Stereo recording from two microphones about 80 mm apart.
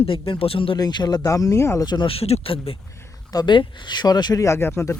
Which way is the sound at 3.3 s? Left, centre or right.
Left.